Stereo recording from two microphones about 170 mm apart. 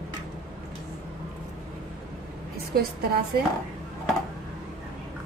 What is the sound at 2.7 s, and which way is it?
Speech, 65° right (ahead or behind).